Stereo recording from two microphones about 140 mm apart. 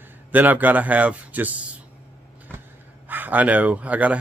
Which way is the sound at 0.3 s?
10° right (ahead or behind).